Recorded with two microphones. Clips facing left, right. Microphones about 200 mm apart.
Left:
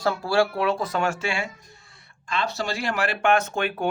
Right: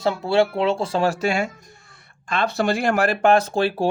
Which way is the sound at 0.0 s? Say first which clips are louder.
Right 3 dB; 20° right (ahead or behind).